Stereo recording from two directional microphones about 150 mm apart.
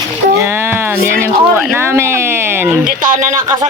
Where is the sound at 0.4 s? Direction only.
15° right (ahead or behind).